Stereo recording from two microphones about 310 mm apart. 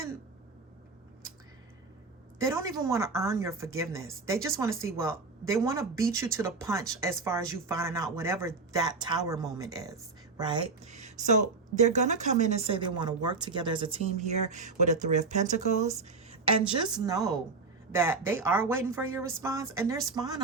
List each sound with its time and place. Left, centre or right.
2.4 s a woman's voice: centre